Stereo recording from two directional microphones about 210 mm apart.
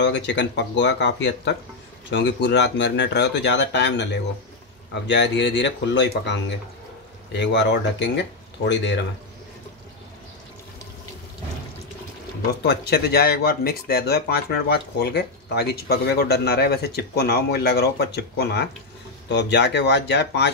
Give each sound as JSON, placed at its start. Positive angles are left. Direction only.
{"t": 0.0, "sound": "speech", "side_deg": 55}
{"t": 7.3, "sound": "speech", "side_deg": 55}
{"t": 12.6, "sound": "speech", "side_deg": 50}